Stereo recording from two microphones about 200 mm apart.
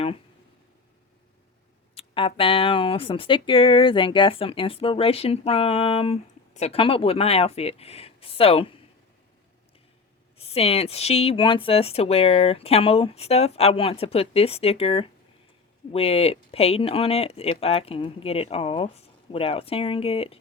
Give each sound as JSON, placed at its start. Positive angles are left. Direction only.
{"t": 2.0, "sound": "speech", "side_deg": 30}
{"t": 10.3, "sound": "speech", "side_deg": 30}